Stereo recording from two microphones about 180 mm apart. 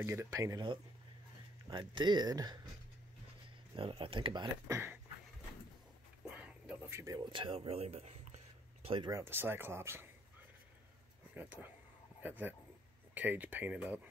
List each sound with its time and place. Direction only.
0.0 s speech: 15° right (ahead or behind)
3.7 s speech: 30° right (ahead or behind)
6.3 s a sound: 10° right (ahead or behind); by 8.4 s 35° right (ahead or behind)
8.8 s speech: 30° right (ahead or behind)
9.1 s speech: 15° right (ahead or behind)
12.2 s speech: 10° right (ahead or behind)